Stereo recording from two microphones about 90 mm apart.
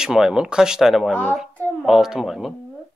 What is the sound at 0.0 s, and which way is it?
Speech, 5° right (ahead or behind).